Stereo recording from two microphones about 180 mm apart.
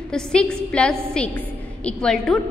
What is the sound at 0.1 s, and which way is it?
A woman's voice, 5° left (ahead or behind).